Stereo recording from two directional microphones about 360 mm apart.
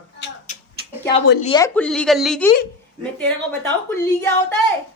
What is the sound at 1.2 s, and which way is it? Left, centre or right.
Speech, left.